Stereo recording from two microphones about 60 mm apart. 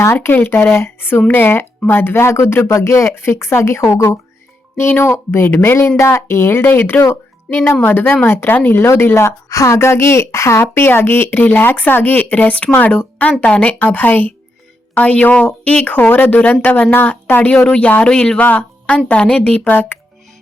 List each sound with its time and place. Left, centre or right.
0.0 s speech: left
2.6 s speech: left
4.8 s a woman's voice: left
17.5 s speech: centre
18.3 s speech: left